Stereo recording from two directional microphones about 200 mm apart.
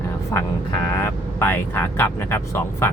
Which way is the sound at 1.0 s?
10° left (ahead or behind).